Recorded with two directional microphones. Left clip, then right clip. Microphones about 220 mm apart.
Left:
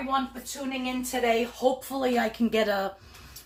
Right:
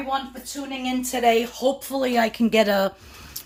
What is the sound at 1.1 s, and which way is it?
Speech, 50° right (ahead or behind).